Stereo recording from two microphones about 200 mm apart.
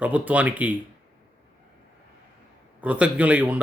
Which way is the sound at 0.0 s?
10° right (ahead or behind).